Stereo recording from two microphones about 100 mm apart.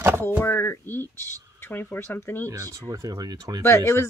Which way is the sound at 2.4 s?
35° right (ahead or behind).